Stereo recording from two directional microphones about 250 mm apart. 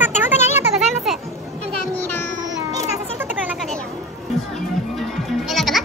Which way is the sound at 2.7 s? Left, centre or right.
Centre.